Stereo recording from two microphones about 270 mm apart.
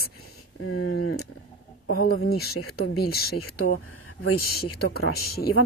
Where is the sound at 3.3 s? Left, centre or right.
Left.